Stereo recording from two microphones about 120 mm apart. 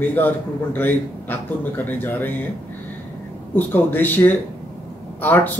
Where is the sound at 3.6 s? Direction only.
15° left (ahead or behind).